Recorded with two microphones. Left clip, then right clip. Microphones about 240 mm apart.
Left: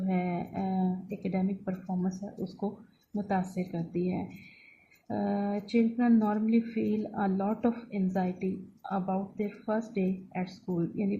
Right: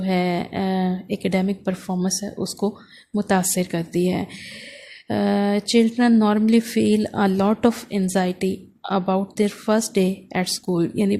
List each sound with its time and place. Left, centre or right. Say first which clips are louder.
0.1 s a woman's voice: right 12 dB; right
5.2 s a woman's voice: right 12 dB; right